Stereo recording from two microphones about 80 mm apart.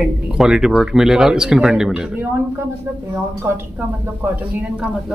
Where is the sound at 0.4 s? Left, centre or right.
Centre.